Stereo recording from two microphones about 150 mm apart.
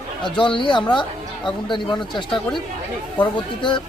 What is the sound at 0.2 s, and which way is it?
Speech, 30° left (ahead or behind).